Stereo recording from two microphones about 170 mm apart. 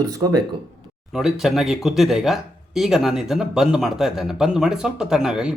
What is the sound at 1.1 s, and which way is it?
Speech, centre (ahead or behind).